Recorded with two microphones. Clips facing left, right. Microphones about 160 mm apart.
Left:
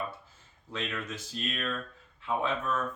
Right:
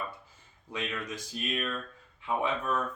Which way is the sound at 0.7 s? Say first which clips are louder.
Even; 15° right (ahead or behind).